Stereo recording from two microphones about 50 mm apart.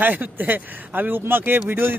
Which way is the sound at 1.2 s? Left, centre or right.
Right.